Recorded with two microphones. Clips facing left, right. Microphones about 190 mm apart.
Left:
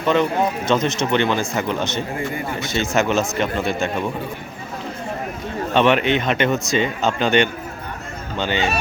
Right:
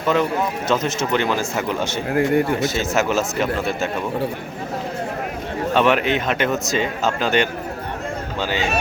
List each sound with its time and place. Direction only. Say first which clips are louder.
0.7 s speech: even; 5° right (ahead or behind)
2.0 s speech: right 8 dB; 65° right (ahead or behind)
2.6 s speech: even; 5° right (ahead or behind)
5.7 s speech: left 1 dB; 5° right (ahead or behind)